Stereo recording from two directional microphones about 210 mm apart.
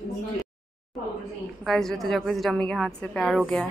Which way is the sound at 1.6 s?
Centre (ahead or behind).